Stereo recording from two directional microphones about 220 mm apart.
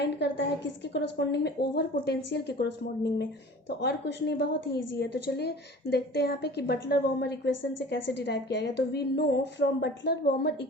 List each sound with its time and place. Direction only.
0.0 s a woman's voice: 50° left (ahead or behind)
3.8 s a woman's voice: 50° left (ahead or behind)